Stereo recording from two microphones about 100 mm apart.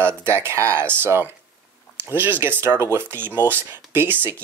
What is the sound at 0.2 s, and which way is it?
Speech, 25° right (ahead or behind).